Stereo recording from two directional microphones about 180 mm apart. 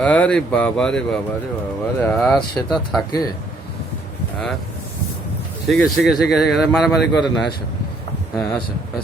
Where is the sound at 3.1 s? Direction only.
20° left (ahead or behind).